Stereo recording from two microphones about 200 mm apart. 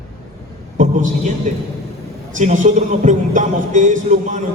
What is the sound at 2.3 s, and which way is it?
Speech, 40° right (ahead or behind).